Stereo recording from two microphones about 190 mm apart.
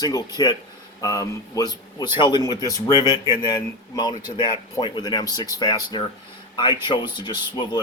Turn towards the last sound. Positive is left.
turn(degrees=25)  # may be behind; listen again after turning